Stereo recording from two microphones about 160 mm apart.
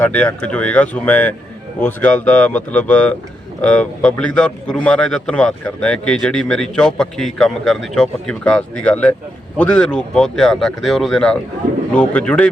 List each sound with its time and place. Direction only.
0.0 s a man's voice: 10° left (ahead or behind)